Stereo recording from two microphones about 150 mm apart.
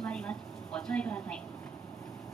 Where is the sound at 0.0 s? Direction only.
5° left (ahead or behind).